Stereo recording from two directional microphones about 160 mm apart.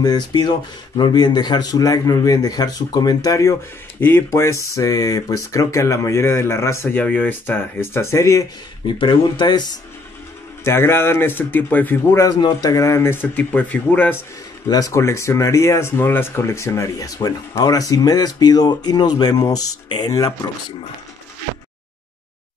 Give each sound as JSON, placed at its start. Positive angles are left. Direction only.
{"t": 0.0, "sound": "speech", "side_deg": 25}
{"t": 10.6, "sound": "speech", "side_deg": 15}
{"t": 12.4, "sound": "speech", "side_deg": 25}